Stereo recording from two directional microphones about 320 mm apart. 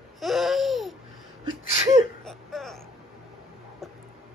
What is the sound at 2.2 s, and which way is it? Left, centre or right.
Whimper, centre.